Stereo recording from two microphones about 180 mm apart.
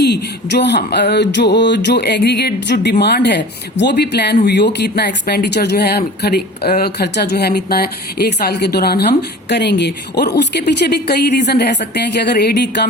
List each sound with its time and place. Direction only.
0.0 s speech: 70° left (ahead or behind)